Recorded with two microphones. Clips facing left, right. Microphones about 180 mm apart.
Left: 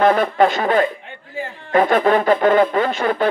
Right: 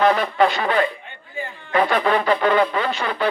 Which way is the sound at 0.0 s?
50° left (ahead or behind).